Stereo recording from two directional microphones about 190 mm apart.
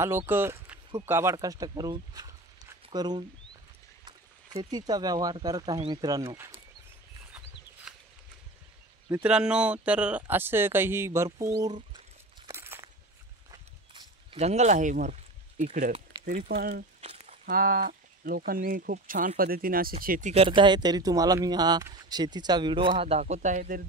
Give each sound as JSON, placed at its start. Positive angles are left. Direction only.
{"t": 0.0, "sound": "speech", "side_deg": -15}
{"t": 4.6, "sound": "speech", "side_deg": -20}
{"t": 9.1, "sound": "speech", "side_deg": -5}
{"t": 12.4, "sound": "walk", "side_deg": -10}
{"t": 13.5, "sound": "a sound", "side_deg": -25}
{"t": 14.4, "sound": "speech", "side_deg": -35}
{"t": 17.0, "sound": "a sound", "side_deg": -35}
{"t": 17.5, "sound": "speech", "side_deg": -50}
{"t": 20.4, "sound": "speech", "side_deg": -25}